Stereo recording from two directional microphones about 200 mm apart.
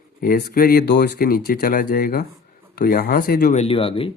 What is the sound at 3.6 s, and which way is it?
Speech, 25° left (ahead or behind).